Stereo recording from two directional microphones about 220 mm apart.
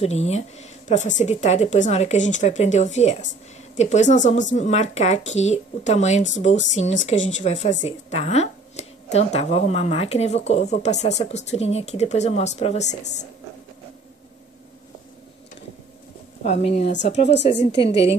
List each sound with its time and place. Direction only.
0.0 s a woman's voice: 30° left (ahead or behind)
16.4 s a woman's voice: 30° left (ahead or behind)